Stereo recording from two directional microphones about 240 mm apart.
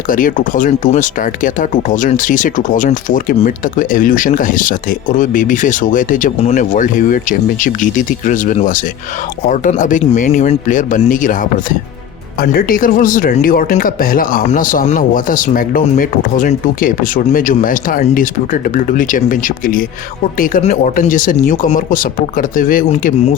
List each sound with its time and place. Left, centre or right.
0.1 s speech: left